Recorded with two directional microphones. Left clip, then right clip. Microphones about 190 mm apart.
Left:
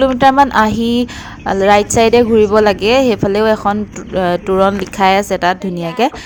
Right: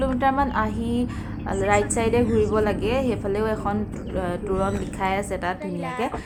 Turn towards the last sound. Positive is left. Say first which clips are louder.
# left 12 dB
turn(degrees=45)  # may be behind; listen again after turning